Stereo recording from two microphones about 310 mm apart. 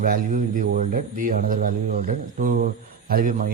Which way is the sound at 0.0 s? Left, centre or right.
Right.